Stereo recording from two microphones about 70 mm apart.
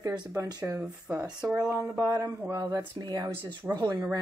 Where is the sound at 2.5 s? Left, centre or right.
Right.